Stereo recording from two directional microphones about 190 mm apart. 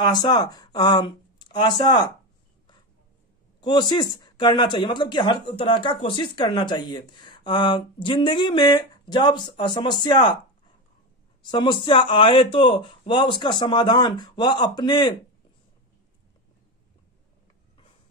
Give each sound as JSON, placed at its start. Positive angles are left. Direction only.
{"t": 0.0, "sound": "speech", "side_deg": 20}
{"t": 3.6, "sound": "speech", "side_deg": 25}
{"t": 11.4, "sound": "speech", "side_deg": 25}